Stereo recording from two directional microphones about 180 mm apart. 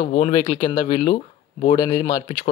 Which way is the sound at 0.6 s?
25° left (ahead or behind).